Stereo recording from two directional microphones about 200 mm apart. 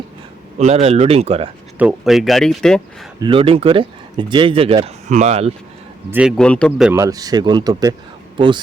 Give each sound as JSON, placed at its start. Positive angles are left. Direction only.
{"t": 0.6, "sound": "speech", "side_deg": -30}
{"t": 1.8, "sound": "speech", "side_deg": -5}
{"t": 3.2, "sound": "speech", "side_deg": -25}
{"t": 6.1, "sound": "a man's voice", "side_deg": -5}
{"t": 6.3, "sound": "speech", "side_deg": 5}
{"t": 6.9, "sound": "speech", "side_deg": -15}